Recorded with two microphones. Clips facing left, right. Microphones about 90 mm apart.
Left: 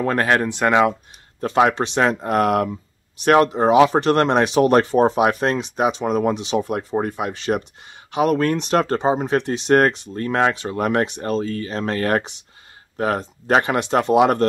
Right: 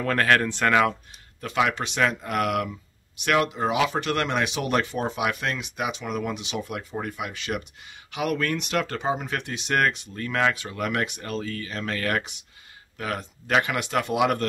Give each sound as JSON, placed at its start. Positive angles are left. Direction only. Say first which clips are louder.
{"t": 0.0, "sound": "speech", "louder": "left 3 dB", "side_deg": 20}
{"t": 1.4, "sound": "speech", "louder": "left 8 dB", "side_deg": 35}